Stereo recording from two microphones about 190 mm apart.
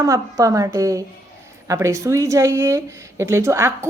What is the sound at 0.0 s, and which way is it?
A woman's voice, 15° right (ahead or behind).